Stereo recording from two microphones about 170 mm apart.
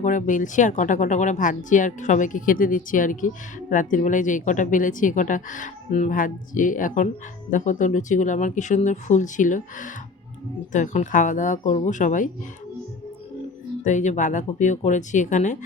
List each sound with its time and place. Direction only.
0.0 s speech: 50° left (ahead or behind)
13.8 s speech: 45° left (ahead or behind)